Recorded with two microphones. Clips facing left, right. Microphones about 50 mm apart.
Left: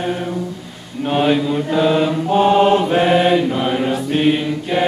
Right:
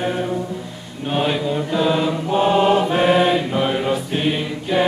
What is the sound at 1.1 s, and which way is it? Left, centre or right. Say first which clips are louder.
Mantra: left 4 dB; centre.